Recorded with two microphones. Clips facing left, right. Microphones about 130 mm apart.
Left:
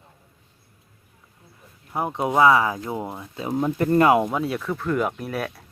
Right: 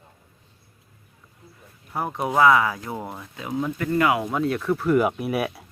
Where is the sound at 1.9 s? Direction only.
20° left (ahead or behind).